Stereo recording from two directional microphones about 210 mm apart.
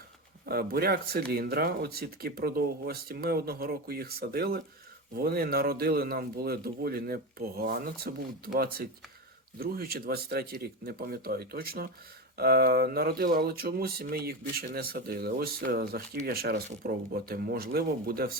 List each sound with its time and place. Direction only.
0.4 s speech: 45° right (ahead or behind)